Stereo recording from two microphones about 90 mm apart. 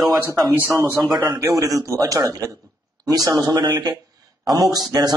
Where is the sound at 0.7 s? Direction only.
30° right (ahead or behind).